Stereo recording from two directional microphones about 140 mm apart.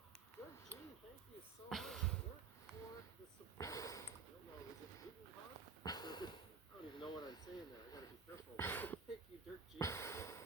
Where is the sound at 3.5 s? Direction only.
20° left (ahead or behind).